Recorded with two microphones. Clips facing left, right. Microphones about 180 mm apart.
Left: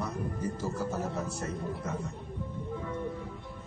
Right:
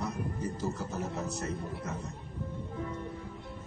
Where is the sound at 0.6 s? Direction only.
25° right (ahead or behind).